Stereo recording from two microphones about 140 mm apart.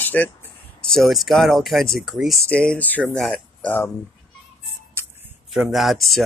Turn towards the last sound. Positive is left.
turn(degrees=0)  # may be behind; listen again after turning